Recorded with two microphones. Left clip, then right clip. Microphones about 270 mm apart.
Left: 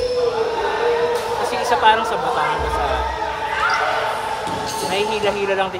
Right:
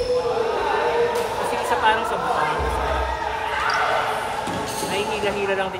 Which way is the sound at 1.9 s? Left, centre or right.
Left.